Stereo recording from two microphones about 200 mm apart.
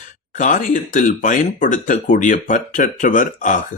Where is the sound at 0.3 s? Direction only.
40° left (ahead or behind).